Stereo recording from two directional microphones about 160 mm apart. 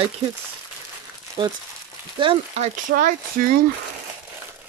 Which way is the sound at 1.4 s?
30° right (ahead or behind).